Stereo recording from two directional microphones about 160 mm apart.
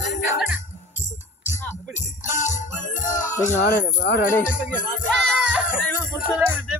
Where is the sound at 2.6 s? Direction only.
55° left (ahead or behind).